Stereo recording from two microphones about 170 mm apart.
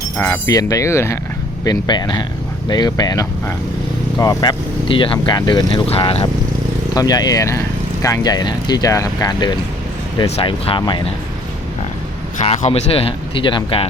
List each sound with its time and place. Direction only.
0.2 s speech: 15° left (ahead or behind); by 6.2 s 35° left (ahead or behind)
6.9 s speech: 20° left (ahead or behind)
12.4 s speech: 40° left (ahead or behind)